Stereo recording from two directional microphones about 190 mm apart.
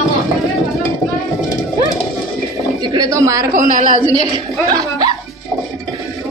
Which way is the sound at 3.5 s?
45° right (ahead or behind).